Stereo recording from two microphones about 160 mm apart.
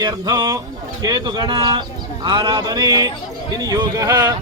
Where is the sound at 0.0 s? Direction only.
25° right (ahead or behind).